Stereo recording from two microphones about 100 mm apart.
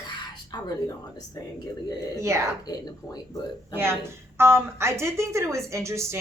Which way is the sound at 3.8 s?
25° right (ahead or behind).